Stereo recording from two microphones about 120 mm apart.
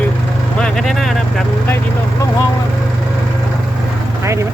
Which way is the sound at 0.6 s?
5° left (ahead or behind).